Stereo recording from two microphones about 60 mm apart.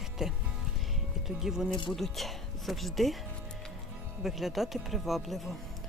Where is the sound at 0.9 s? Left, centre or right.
Centre.